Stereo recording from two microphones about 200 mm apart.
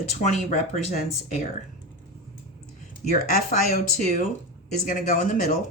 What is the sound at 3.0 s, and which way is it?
Speech, 40° left (ahead or behind).